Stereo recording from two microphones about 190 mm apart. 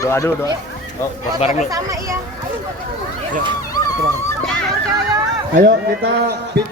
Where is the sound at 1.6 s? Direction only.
15° right (ahead or behind).